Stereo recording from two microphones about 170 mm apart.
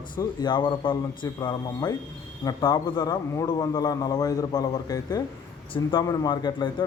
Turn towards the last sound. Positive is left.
turn(degrees=25)  # may be behind; listen again after turning